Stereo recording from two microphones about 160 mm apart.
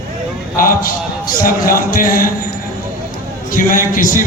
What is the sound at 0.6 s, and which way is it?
A man's voice, 65° left (ahead or behind).